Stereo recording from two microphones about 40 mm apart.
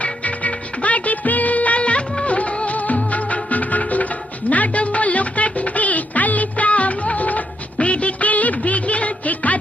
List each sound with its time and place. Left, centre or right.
0.0 s music: left